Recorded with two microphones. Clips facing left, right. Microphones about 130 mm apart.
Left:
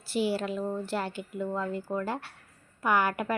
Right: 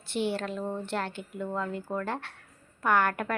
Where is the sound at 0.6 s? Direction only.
20° right (ahead or behind).